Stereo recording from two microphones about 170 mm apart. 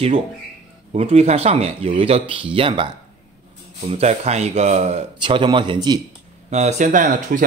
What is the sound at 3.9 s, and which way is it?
Speech, 40° right (ahead or behind).